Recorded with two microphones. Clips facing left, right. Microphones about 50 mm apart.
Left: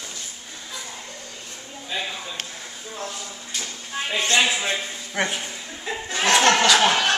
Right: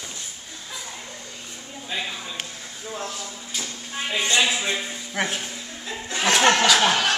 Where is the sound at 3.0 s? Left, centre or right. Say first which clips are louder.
Even; centre.